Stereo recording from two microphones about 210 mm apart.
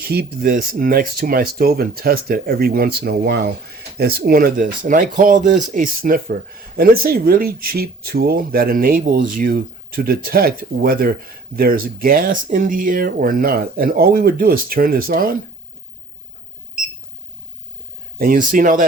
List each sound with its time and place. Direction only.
0.1 s speech: 45° right (ahead or behind)
18.2 s speech: 40° right (ahead or behind)